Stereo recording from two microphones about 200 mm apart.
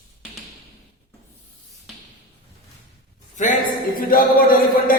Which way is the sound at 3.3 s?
40° left (ahead or behind).